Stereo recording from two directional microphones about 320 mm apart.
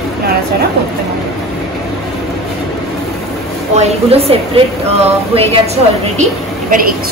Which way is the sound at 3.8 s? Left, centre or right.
Centre.